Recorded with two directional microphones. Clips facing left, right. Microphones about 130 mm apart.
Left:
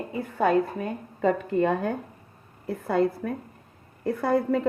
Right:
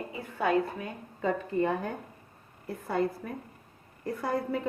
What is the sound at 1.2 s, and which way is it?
A woman's voice, 75° left (ahead or behind).